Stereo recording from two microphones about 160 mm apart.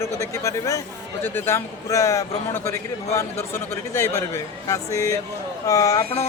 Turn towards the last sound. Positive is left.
turn(degrees=20)  # may be behind; listen again after turning